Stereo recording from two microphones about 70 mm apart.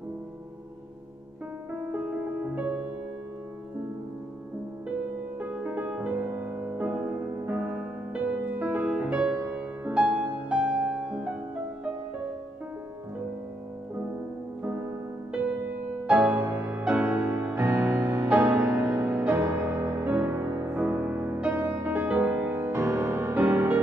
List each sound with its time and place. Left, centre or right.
1.7 s music: right
5.4 s music: right
16.1 s music: right
17.6 s music: right
18.3 s music: right
22.7 s music: right
23.3 s music: right